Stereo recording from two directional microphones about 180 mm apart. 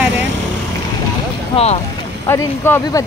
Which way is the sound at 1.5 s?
35° left (ahead or behind).